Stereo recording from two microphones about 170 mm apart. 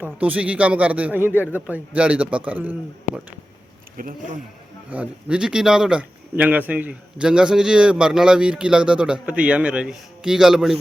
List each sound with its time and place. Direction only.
0.0 s a man's voice: 10° right (ahead or behind)
3.9 s speech: 55° right (ahead or behind)
4.9 s speech: 5° right (ahead or behind)